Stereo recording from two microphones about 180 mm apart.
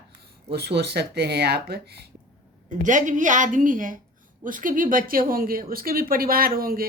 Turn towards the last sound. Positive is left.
turn(degrees=-55)  # may be behind; listen again after turning